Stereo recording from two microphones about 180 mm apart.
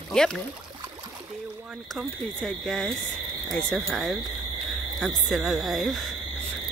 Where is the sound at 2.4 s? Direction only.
5° left (ahead or behind).